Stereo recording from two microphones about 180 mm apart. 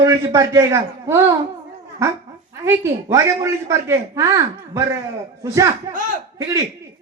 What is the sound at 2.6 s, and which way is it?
A man's voice, 15° right (ahead or behind).